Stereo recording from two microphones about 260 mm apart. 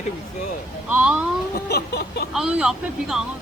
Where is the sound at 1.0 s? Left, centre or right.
Centre.